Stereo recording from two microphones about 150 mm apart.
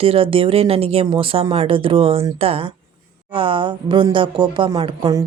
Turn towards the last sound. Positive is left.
turn(degrees=-35)  # may be behind; listen again after turning